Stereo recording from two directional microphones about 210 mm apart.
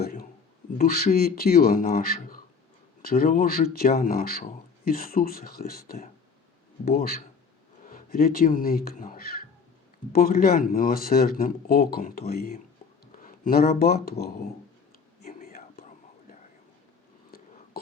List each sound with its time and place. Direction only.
0.0 s a sound: 45° left (ahead or behind)
0.8 s speech: 45° left (ahead or behind)
15.2 s whispering: 40° left (ahead or behind)